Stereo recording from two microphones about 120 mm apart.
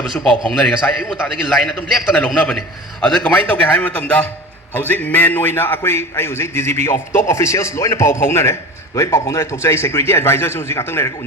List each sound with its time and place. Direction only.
0.1 s a man's voice: 5° left (ahead or behind)